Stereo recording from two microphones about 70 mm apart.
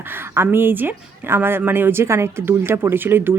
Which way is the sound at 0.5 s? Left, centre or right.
Right.